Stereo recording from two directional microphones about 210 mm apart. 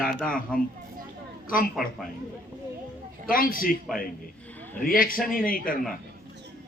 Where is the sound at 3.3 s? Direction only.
40° left (ahead or behind).